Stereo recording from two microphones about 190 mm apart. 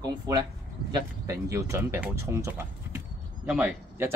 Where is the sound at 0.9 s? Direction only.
15° right (ahead or behind).